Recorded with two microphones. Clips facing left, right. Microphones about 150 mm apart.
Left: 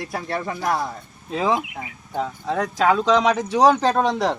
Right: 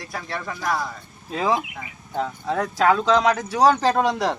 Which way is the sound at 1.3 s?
Centre (ahead or behind).